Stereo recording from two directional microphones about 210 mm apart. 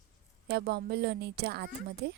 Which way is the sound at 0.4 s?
50° right (ahead or behind).